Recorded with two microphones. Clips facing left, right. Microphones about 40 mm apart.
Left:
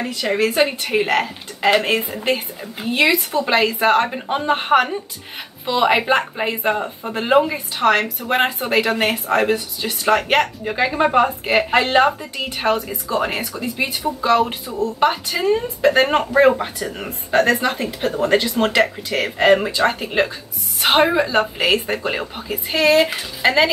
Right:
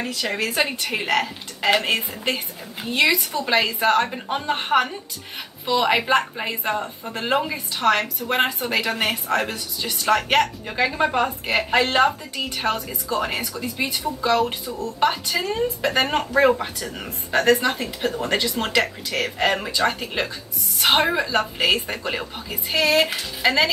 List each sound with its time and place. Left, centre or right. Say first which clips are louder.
0.0 s speech: left 6 dB; centre
17.7 s speech: left 4 dB; left